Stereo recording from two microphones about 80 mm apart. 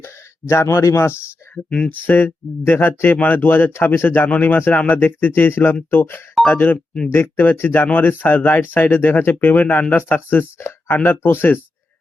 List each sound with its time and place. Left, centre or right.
0.0 s speech: left
1.5 s speech: centre
1.9 s speech: left